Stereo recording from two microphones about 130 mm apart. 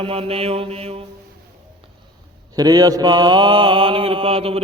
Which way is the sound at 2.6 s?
30° right (ahead or behind).